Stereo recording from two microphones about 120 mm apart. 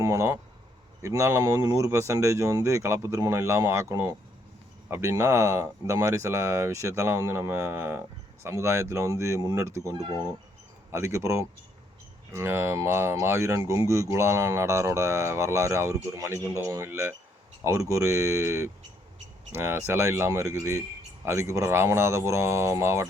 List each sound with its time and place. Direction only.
0.0 s speech: 25° right (ahead or behind)